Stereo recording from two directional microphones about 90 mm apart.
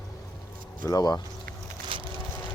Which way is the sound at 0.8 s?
45° left (ahead or behind).